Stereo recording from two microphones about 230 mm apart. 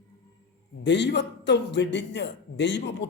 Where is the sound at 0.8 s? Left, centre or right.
Left.